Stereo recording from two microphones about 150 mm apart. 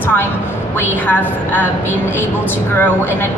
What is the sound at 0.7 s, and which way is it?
Speech, 15° left (ahead or behind).